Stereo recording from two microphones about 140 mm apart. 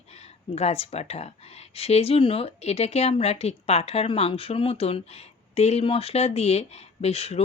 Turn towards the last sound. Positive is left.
turn(degrees=45)  # may be behind; listen again after turning